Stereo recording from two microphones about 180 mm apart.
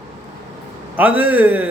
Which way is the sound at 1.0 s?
10° right (ahead or behind).